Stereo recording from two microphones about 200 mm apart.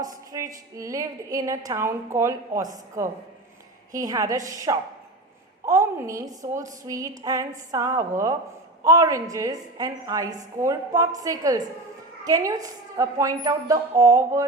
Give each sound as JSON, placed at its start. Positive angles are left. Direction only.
{"t": 0.3, "sound": "a woman's voice", "side_deg": -15}